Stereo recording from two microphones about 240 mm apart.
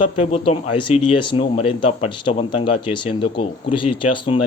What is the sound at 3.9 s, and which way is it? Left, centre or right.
Speech, left.